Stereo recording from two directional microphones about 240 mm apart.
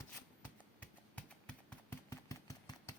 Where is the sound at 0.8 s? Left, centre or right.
Centre.